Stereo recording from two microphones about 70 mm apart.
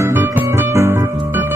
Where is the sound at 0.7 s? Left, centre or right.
Right.